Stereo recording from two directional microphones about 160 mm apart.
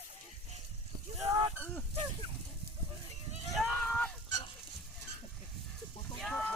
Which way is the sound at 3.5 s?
5° left (ahead or behind).